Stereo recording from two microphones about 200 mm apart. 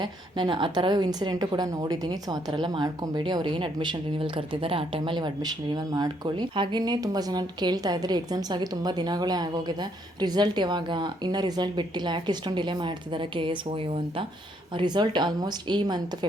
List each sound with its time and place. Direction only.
0.0 s a woman's voice: 20° right (ahead or behind)